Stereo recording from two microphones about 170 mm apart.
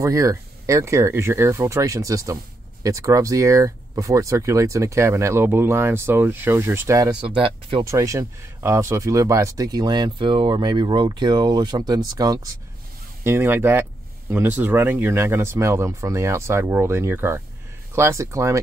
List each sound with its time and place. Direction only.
0.0 s speech: 20° right (ahead or behind)
7.2 s speech: 30° right (ahead or behind)
7.8 s speech: 20° right (ahead or behind)